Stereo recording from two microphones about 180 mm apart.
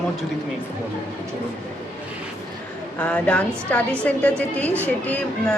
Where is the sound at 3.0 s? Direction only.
5° left (ahead or behind).